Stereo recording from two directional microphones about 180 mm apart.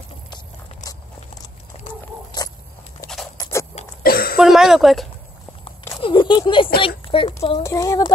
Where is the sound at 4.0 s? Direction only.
55° left (ahead or behind).